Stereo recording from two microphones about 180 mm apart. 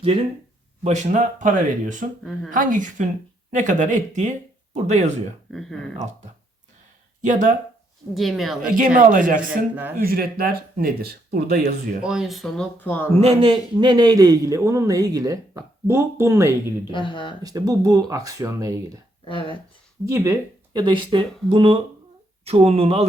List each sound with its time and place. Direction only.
0.9 s speech: 40° right (ahead or behind)
5.5 s speech: centre (ahead or behind)
7.2 s speech: 45° right (ahead or behind)
8.1 s speech: centre (ahead or behind)
9.0 s speech: 50° right (ahead or behind)
12.0 s speech: centre (ahead or behind)
13.1 s a man's voice: 35° right (ahead or behind); by 16.7 s 15° right (ahead or behind)
16.8 s speech: 25° left (ahead or behind)
17.4 s a man's voice: 20° right (ahead or behind)
19.2 s speech: 30° left (ahead or behind)
20.1 s speech: 15° right (ahead or behind)
20.7 s a man's voice: 25° right (ahead or behind)